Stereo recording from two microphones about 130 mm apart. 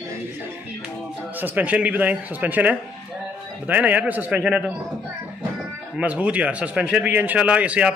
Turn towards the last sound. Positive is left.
turn(degrees=-10)  # may be behind; listen again after turning